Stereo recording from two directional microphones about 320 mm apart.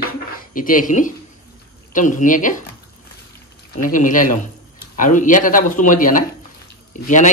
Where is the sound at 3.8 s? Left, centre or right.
Left.